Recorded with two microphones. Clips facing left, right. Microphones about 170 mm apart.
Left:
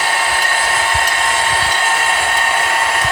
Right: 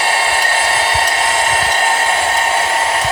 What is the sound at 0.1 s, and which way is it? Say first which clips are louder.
Hair dryer: right 2 dB; 30° right (ahead or behind).